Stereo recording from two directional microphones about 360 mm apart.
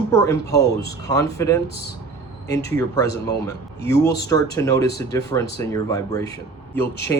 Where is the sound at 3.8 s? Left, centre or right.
Left.